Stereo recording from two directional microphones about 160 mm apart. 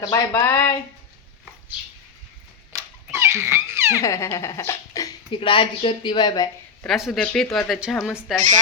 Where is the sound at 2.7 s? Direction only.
20° right (ahead or behind).